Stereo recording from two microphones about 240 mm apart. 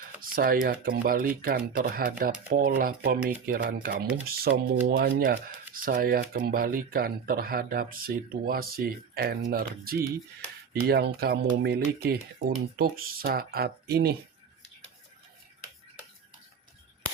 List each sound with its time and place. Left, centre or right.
0.2 s speech: right